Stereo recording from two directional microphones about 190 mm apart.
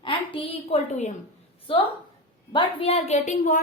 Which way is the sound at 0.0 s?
25° left (ahead or behind).